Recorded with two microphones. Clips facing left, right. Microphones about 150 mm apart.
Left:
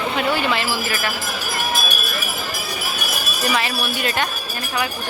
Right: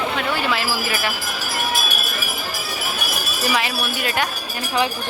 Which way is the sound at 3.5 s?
10° right (ahead or behind).